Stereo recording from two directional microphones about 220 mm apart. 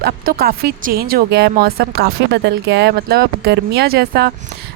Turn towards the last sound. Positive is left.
turn(degrees=-45)  # may be behind; listen again after turning